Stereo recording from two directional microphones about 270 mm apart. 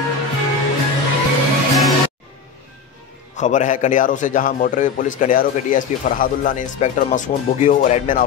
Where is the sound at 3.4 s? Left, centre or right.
Left.